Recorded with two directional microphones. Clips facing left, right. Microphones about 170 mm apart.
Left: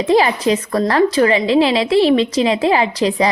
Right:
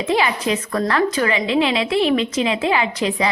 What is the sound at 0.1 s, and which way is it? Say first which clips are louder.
A woman's voice: left 6 dB; 35° left (ahead or behind).